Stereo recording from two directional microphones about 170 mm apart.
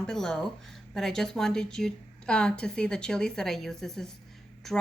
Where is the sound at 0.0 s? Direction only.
5° left (ahead or behind).